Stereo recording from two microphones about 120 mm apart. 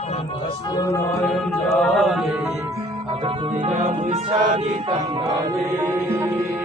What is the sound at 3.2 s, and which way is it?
Music, 55° right (ahead or behind).